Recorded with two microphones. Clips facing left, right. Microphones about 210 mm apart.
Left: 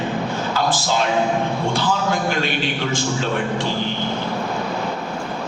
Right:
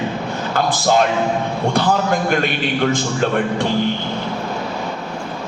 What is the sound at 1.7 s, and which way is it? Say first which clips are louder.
Speech: right 7 dB; 50° right (ahead or behind).